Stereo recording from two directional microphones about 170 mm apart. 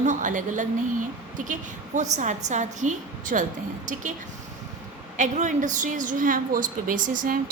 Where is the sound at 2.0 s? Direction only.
45° right (ahead or behind).